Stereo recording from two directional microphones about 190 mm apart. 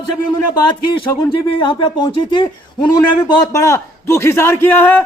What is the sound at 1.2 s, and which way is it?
A man's voice, 25° left (ahead or behind).